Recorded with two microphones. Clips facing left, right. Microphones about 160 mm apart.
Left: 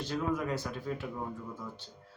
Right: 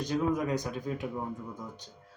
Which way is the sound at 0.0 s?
15° right (ahead or behind).